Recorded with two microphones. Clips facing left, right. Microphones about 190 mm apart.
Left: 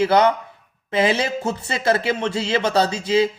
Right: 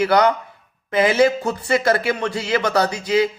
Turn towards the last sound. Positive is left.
turn(degrees=25)  # may be behind; listen again after turning